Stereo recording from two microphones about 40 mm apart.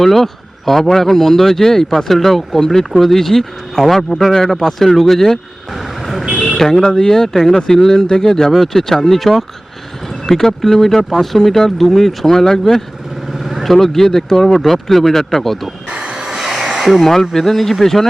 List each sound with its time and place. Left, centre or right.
0.0 s speech: centre
13.4 s vehicle: centre
13.7 s speech: centre
15.9 s train: right
16.4 s a sound: centre
17.0 s speech: centre